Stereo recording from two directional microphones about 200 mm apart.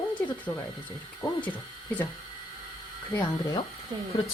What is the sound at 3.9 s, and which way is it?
Speech, 20° right (ahead or behind).